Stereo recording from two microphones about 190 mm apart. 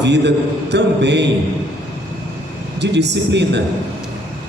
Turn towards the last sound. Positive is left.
turn(degrees=-65)  # may be behind; listen again after turning